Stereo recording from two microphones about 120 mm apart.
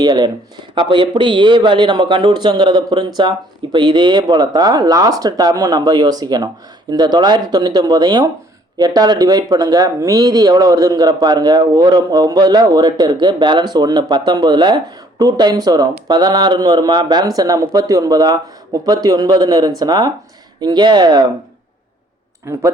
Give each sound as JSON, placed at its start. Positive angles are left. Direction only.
{"t": 0.0, "sound": "speech", "side_deg": -35}
{"t": 22.5, "sound": "speech", "side_deg": -20}